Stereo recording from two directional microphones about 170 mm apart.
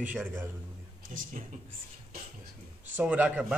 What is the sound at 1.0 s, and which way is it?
Speech, 55° right (ahead or behind).